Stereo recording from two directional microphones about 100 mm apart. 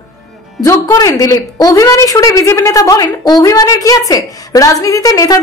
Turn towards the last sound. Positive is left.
turn(degrees=35)  # may be behind; listen again after turning